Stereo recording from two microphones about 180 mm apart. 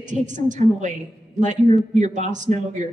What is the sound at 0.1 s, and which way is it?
A man's voice, 45° right (ahead or behind).